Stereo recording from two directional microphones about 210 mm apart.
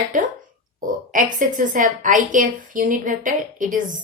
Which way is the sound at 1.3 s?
40° right (ahead or behind).